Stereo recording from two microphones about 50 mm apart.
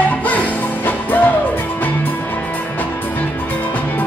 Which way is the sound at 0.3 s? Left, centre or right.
Left.